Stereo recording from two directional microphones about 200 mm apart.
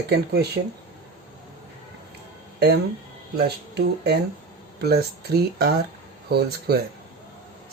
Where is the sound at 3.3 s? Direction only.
55° right (ahead or behind).